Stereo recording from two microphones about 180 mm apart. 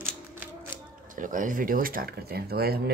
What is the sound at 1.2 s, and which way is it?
Speech, 45° right (ahead or behind).